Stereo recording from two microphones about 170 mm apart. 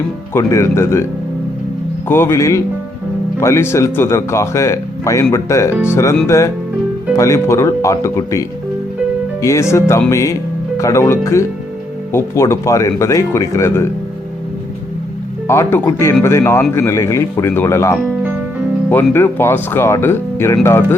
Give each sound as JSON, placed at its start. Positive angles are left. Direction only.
{"t": 0.3, "sound": "speech", "side_deg": 15}
{"t": 2.0, "sound": "speech", "side_deg": 15}
{"t": 15.4, "sound": "speech", "side_deg": 15}
{"t": 19.1, "sound": "speech", "side_deg": 15}